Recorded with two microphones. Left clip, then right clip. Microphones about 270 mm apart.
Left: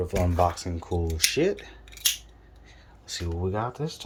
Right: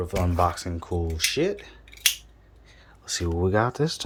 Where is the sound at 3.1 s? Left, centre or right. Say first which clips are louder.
Right 5 dB; centre.